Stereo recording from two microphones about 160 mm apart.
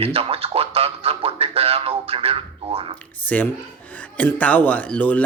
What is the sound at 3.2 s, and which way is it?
Speech, 10° left (ahead or behind).